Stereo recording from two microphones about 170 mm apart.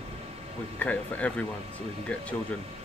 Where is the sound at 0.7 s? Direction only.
10° left (ahead or behind).